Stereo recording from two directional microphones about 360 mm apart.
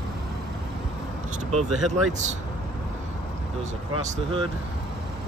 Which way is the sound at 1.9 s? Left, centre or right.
Centre.